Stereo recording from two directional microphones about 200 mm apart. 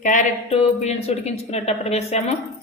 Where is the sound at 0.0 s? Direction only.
35° left (ahead or behind).